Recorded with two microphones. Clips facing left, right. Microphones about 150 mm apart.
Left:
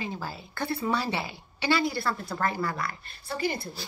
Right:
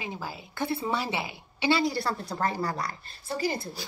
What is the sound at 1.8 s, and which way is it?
A woman's voice, 35° right (ahead or behind).